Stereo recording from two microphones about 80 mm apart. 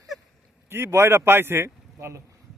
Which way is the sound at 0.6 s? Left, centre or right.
Right.